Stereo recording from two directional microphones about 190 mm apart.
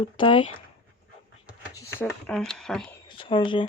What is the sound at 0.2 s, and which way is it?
Speech, 25° left (ahead or behind).